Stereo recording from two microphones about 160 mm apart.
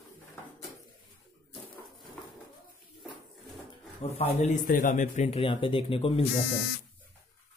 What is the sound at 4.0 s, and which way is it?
Speech, 40° left (ahead or behind).